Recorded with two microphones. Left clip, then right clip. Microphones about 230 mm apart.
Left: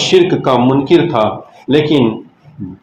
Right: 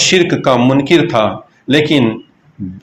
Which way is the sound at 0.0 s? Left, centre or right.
Right.